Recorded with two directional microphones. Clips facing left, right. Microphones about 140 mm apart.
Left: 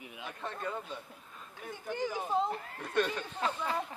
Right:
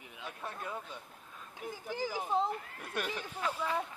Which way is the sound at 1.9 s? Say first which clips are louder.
Left 2 dB; 5° right (ahead or behind).